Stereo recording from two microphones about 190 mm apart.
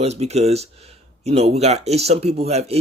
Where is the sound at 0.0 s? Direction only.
35° right (ahead or behind).